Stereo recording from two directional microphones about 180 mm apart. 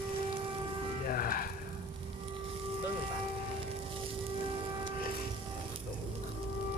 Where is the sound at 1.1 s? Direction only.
50° left (ahead or behind).